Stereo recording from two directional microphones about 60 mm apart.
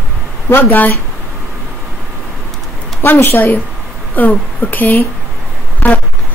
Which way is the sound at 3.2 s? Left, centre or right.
Left.